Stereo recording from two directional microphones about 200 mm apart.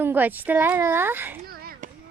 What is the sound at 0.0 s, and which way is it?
Speech, 10° right (ahead or behind).